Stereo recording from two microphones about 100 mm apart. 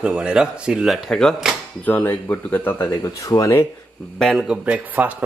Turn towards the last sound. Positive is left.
turn(degrees=-15)  # may be behind; listen again after turning